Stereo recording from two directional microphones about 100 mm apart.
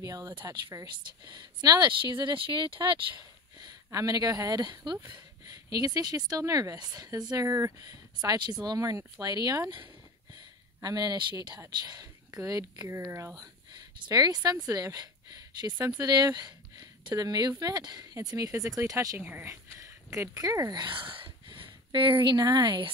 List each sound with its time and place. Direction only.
0.0 s speech: 35° right (ahead or behind)
0.8 s speech: 45° right (ahead or behind)
3.5 s speech: 40° right (ahead or behind)
13.4 s speech: 45° right (ahead or behind)
19.1 s speech: 20° right (ahead or behind)
20.7 s speech: 50° right (ahead or behind)